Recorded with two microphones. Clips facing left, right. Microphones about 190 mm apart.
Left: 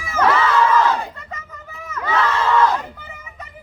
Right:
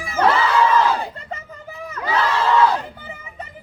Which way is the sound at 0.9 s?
30° right (ahead or behind).